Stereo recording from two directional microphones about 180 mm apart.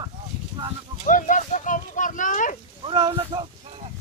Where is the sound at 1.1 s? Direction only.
45° left (ahead or behind).